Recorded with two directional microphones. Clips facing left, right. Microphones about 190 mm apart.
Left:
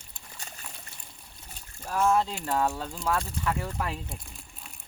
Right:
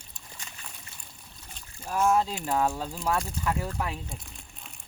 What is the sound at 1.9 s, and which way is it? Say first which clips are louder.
Speech: even; 5° right (ahead or behind).